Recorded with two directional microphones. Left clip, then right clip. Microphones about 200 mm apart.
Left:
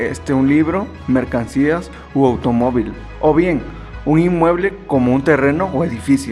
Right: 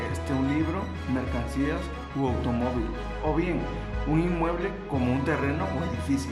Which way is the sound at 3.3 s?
35° left (ahead or behind).